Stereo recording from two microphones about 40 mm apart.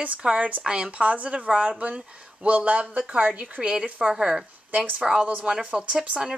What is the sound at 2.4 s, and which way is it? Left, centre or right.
Speech, right.